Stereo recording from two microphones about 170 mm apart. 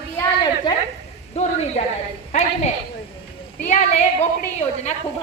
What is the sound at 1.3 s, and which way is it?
Speech, 40° left (ahead or behind).